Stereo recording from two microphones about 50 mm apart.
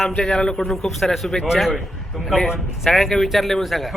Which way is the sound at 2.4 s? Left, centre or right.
Centre.